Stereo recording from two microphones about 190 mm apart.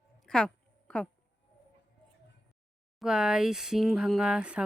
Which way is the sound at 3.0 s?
5° right (ahead or behind).